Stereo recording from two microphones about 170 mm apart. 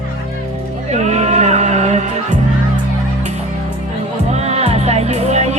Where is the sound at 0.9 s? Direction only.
40° right (ahead or behind).